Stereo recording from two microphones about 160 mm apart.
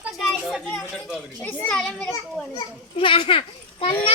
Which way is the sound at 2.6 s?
30° left (ahead or behind).